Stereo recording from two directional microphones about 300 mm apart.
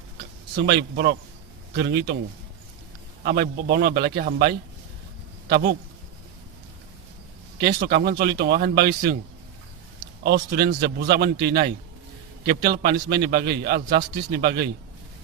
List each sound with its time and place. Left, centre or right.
0.5 s a man's voice: right
3.2 s a man's voice: right
7.6 s a man's voice: right
10.2 s a man's voice: right